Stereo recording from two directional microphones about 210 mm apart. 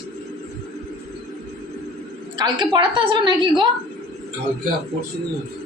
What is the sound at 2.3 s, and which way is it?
A woman's voice, 20° right (ahead or behind).